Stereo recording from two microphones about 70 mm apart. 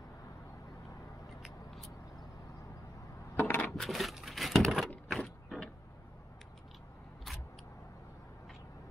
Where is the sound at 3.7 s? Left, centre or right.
Centre.